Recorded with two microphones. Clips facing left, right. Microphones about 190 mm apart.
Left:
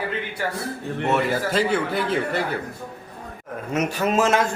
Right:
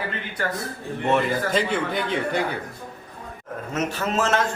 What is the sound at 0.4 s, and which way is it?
A man's voice, 10° left (ahead or behind).